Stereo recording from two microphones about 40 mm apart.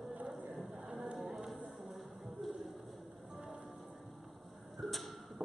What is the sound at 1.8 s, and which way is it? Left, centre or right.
Music, centre.